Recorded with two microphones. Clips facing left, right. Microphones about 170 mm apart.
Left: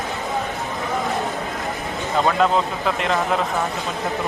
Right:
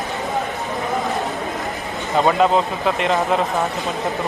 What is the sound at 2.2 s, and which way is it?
Speech, 5° right (ahead or behind).